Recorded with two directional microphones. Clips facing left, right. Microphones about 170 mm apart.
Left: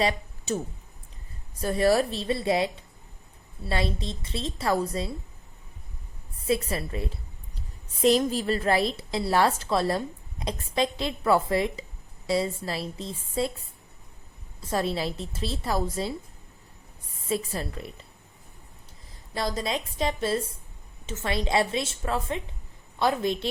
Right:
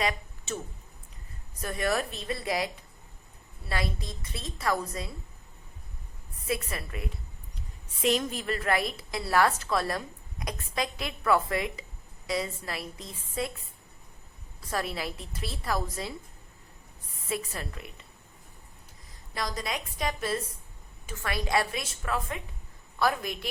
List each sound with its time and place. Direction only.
0.0 s speech: 35° left (ahead or behind)
1.6 s a woman's voice: 30° left (ahead or behind)
3.7 s a woman's voice: 25° left (ahead or behind)
6.5 s a woman's voice: 30° left (ahead or behind)
14.6 s a woman's voice: 25° left (ahead or behind)
17.2 s a woman's voice: 30° left (ahead or behind)
19.3 s a woman's voice: 30° left (ahead or behind)